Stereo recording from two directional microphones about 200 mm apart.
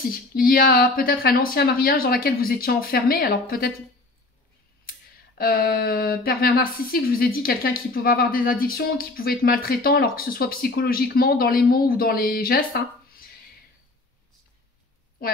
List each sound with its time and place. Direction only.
0.1 s speech: 45° left (ahead or behind)
5.4 s speech: 45° left (ahead or behind)
15.2 s a woman's voice: 50° left (ahead or behind)